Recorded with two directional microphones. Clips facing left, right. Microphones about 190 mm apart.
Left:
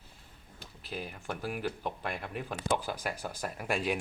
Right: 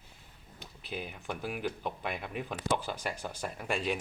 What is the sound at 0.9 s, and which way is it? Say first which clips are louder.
Speech: even; centre (ahead or behind).